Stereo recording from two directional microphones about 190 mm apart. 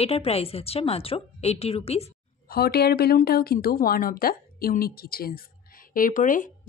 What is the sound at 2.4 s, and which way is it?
Speech, 55° left (ahead or behind).